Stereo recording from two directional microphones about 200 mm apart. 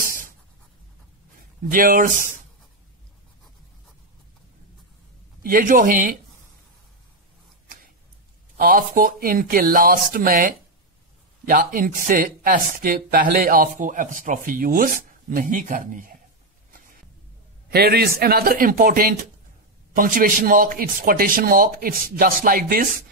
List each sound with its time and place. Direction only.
0.0 s writing: 45° right (ahead or behind)
1.7 s speech: 45° right (ahead or behind)
5.4 s speech: 45° right (ahead or behind)
8.5 s speech: 45° right (ahead or behind)
16.7 s a sound: 45° right (ahead or behind)
17.6 s a man's voice: 50° right (ahead or behind)